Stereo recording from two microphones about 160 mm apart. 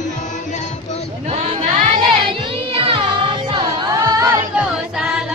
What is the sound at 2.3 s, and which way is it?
Music, 35° right (ahead or behind).